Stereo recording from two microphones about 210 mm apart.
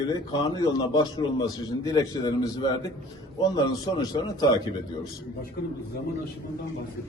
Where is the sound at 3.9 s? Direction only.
25° left (ahead or behind).